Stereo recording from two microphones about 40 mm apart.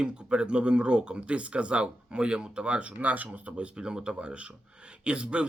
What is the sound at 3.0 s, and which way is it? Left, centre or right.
Speech, right.